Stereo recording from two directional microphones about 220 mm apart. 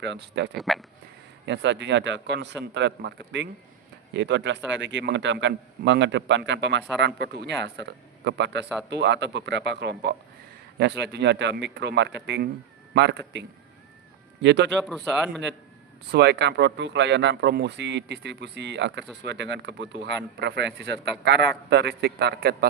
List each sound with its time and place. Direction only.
0.0 s speech: 50° right (ahead or behind)
0.5 s speech: centre (ahead or behind)
1.5 s speech: 55° right (ahead or behind)
14.4 s speech: 55° right (ahead or behind)
14.8 s speech: centre (ahead or behind)
16.1 s speech: 50° right (ahead or behind)